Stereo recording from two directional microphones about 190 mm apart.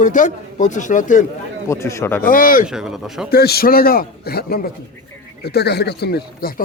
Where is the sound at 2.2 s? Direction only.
45° left (ahead or behind).